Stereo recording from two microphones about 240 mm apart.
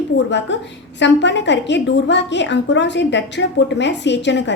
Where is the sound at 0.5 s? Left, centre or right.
Left.